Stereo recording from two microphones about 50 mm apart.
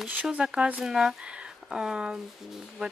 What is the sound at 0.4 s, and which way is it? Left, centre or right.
Speech, centre.